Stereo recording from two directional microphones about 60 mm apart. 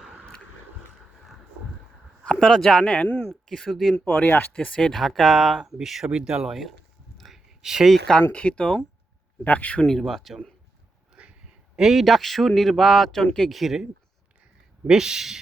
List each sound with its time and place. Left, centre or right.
2.2 s a sound: centre
2.5 s speech: centre
3.2 s speech: centre
3.9 s speech: left
4.5 s speech: centre
7.2 s a sound: centre
8.3 s speech: centre
9.8 s speech: centre
11.2 s a sound: right
11.8 s speech: centre
13.5 s speech: centre
14.8 s speech: centre